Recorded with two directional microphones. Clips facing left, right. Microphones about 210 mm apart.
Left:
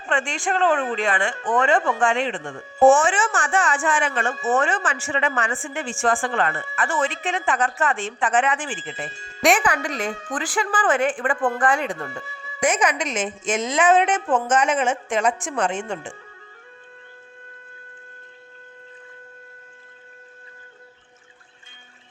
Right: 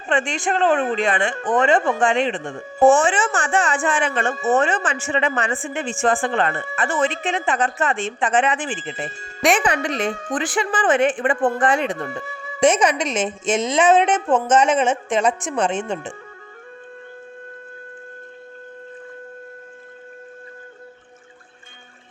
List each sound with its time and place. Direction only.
0.1 s a woman's voice: 20° right (ahead or behind)
9.0 s speech: 50° right (ahead or behind)
9.6 s a woman's voice: 25° right (ahead or behind)
12.2 s speech: 50° right (ahead or behind)
12.5 s a woman's voice: 25° right (ahead or behind)